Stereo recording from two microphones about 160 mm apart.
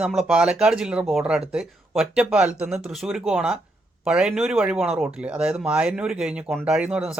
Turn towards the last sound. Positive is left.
turn(degrees=-5)  # may be behind; listen again after turning